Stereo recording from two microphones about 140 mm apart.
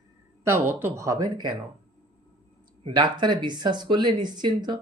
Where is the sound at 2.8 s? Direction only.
30° right (ahead or behind).